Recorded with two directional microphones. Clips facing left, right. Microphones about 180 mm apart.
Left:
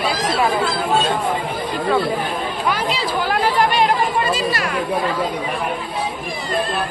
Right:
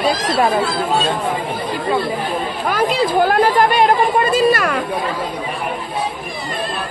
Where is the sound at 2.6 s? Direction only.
50° right (ahead or behind).